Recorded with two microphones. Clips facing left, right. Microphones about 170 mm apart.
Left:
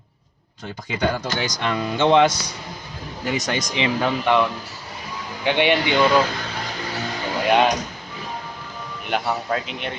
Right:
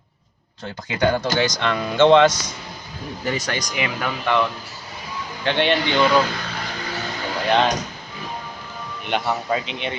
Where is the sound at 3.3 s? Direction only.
20° left (ahead or behind).